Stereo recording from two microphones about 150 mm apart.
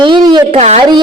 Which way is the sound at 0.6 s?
50° right (ahead or behind).